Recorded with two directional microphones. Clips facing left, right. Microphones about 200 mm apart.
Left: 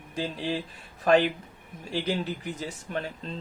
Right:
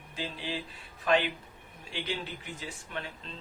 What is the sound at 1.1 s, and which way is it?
Speech, 45° left (ahead or behind).